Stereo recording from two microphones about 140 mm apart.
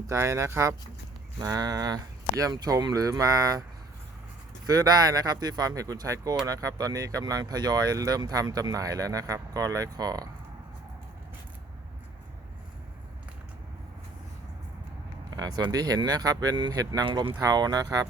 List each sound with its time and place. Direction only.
0.1 s speech: 20° right (ahead or behind)
4.6 s speech: 25° right (ahead or behind)
15.4 s speech: 25° right (ahead or behind)